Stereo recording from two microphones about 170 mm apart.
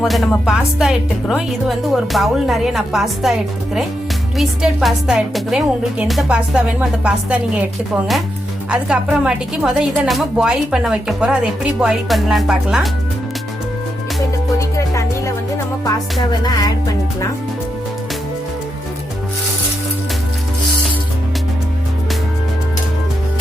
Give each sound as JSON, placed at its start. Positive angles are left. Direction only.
{"t": 0.0, "sound": "a woman's voice", "side_deg": 0}
{"t": 4.4, "sound": "a woman's voice", "side_deg": 0}
{"t": 8.7, "sound": "a woman's voice", "side_deg": -5}
{"t": 16.4, "sound": "music", "side_deg": 25}